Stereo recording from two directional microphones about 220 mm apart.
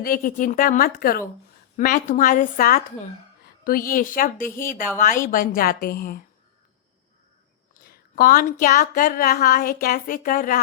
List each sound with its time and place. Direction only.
0.0 s speech: 40° left (ahead or behind)
7.7 s speech: 40° left (ahead or behind)